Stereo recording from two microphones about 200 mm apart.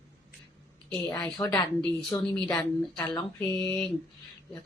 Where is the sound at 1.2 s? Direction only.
20° left (ahead or behind).